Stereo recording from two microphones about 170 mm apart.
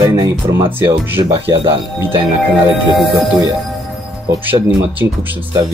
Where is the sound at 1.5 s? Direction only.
30° right (ahead or behind).